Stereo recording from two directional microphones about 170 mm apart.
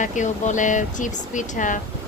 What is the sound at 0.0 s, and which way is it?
Speech, 45° left (ahead or behind).